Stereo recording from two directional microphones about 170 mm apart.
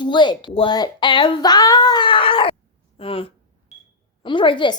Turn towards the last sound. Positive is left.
turn(degrees=30)  # may be behind; listen again after turning